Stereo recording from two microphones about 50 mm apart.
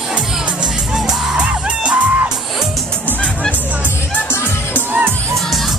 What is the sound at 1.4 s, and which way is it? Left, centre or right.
Music, right.